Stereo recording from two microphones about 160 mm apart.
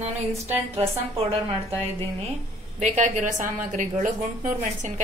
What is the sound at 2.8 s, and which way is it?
A woman's voice, 50° right (ahead or behind).